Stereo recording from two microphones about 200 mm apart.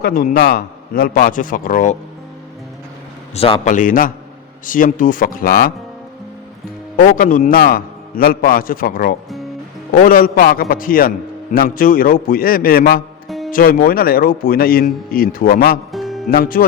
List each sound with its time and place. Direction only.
0.0 s a man's voice: 45° left (ahead or behind)
3.3 s a man's voice: 30° left (ahead or behind); by 5.7 s 45° left (ahead or behind)
6.9 s a man's voice: 45° left (ahead or behind)
13.2 s music: centre (ahead or behind)
13.5 s a man's voice: 45° left (ahead or behind)
15.9 s music: centre (ahead or behind)
16.3 s a man's voice: 45° left (ahead or behind)